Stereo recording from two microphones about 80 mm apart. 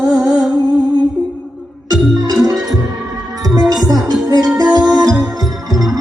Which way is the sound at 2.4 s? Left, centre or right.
Right.